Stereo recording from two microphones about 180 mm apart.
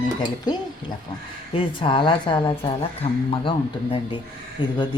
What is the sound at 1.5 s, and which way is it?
Speech, 25° left (ahead or behind).